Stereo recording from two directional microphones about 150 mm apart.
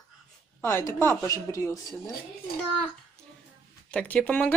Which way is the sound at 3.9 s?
10° left (ahead or behind).